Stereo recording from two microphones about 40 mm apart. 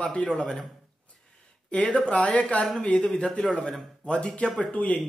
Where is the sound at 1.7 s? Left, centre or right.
Left.